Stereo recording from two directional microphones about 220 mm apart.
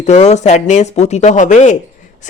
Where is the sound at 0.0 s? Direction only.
30° left (ahead or behind).